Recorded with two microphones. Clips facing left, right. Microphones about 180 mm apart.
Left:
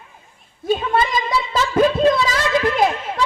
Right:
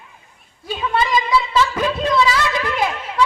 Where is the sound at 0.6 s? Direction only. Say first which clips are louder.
Left 2 dB; 45° left (ahead or behind).